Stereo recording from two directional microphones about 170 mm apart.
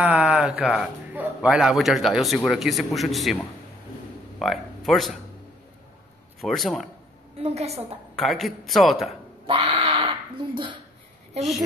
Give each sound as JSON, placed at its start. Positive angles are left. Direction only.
{"t": 0.0, "sound": "a man's voice", "side_deg": -5}
{"t": 4.4, "sound": "speech", "side_deg": 0}
{"t": 6.4, "sound": "speech", "side_deg": 0}
{"t": 7.3, "sound": "a woman's voice", "side_deg": -35}
{"t": 8.2, "sound": "speech", "side_deg": 0}
{"t": 9.5, "sound": "crow", "side_deg": -30}